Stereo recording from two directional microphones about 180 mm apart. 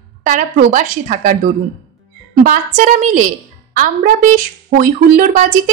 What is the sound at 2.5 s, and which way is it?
A woman's voice, 45° right (ahead or behind).